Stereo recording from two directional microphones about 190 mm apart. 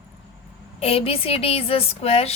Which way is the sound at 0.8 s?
30° left (ahead or behind).